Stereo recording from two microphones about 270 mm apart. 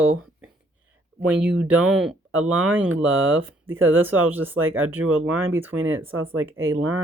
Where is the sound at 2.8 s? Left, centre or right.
Right.